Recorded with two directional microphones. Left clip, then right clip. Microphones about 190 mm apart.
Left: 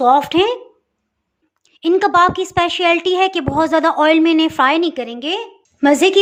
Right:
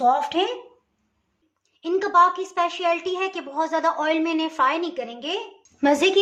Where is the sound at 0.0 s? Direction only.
50° left (ahead or behind).